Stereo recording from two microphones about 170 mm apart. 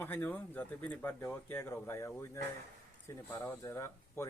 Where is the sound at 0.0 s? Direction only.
10° left (ahead or behind).